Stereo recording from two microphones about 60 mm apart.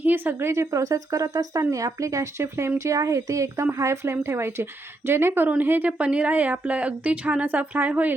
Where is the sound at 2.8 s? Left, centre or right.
Right.